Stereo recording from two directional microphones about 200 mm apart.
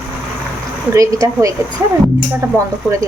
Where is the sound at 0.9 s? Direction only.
15° right (ahead or behind).